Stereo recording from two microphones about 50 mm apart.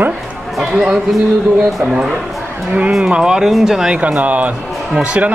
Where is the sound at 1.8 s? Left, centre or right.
Centre.